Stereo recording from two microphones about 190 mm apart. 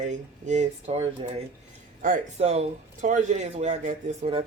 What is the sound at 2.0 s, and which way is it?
A man's voice, 40° right (ahead or behind).